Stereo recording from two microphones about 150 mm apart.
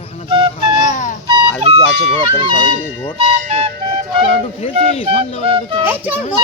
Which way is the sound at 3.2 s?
45° right (ahead or behind).